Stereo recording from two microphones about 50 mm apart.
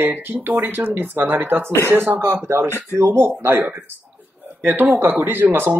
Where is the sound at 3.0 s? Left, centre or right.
Right.